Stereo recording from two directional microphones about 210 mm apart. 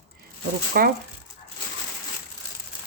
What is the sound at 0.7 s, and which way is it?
Speech, 45° right (ahead or behind).